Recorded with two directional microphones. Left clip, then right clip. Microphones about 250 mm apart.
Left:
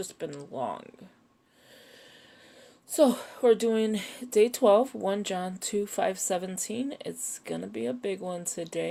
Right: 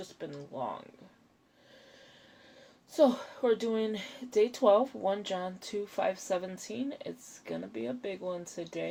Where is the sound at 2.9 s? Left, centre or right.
Left.